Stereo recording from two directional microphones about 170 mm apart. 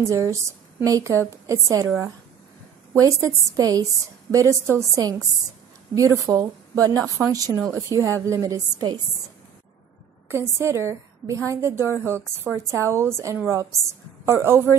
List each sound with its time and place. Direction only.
0.0 s a woman's voice: 15° right (ahead or behind)
2.9 s a woman's voice: 20° right (ahead or behind)
10.2 s a woman's voice: 15° right (ahead or behind)